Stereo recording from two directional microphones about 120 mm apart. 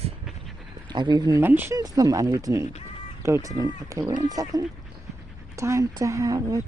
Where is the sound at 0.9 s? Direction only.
40° right (ahead or behind).